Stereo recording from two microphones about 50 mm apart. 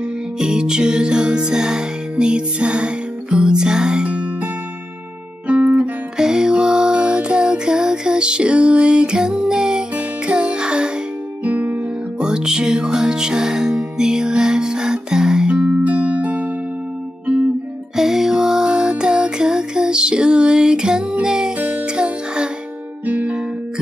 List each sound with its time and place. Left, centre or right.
0.4 s music: centre
5.8 s music: centre
11.4 s music: right
12.2 s music: centre
15.9 s music: right
17.9 s music: centre
23.0 s music: right